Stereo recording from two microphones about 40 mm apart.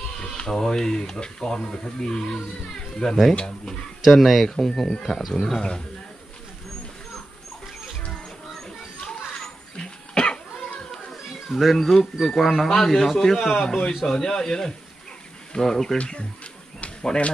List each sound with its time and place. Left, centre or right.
0.5 s speech: centre
4.0 s speech: centre
9.4 s cough: left
11.5 s speech: centre
16.0 s speech: left